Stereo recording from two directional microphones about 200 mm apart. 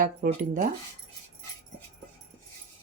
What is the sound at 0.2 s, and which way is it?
Speech, 50° right (ahead or behind).